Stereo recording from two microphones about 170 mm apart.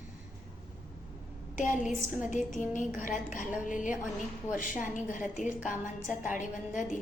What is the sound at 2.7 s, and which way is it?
A woman's voice, 50° left (ahead or behind).